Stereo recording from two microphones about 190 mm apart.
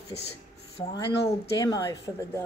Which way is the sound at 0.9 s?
20° left (ahead or behind).